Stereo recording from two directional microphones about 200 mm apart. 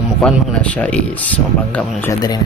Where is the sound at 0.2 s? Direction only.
5° left (ahead or behind).